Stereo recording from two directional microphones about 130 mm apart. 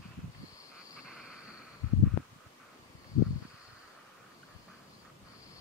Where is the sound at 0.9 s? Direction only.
5° right (ahead or behind).